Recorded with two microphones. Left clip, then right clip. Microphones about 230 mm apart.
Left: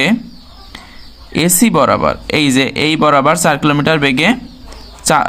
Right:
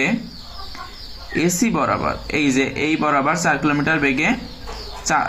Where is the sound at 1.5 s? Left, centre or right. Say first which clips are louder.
Left 9 dB; left.